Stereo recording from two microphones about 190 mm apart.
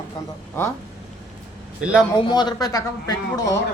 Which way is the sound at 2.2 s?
20° left (ahead or behind).